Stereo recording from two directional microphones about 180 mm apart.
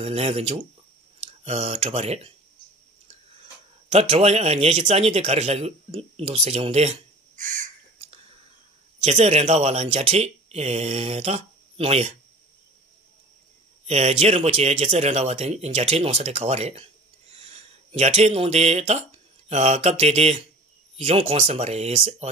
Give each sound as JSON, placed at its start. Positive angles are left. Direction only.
{"t": 0.0, "sound": "speech", "side_deg": -35}
{"t": 3.9, "sound": "speech", "side_deg": -35}
{"t": 9.0, "sound": "speech", "side_deg": -35}
{"t": 13.8, "sound": "speech", "side_deg": -35}